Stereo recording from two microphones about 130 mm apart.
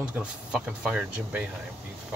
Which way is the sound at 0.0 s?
10° right (ahead or behind).